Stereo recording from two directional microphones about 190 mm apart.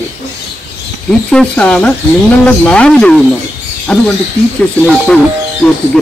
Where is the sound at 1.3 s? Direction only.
5° left (ahead or behind).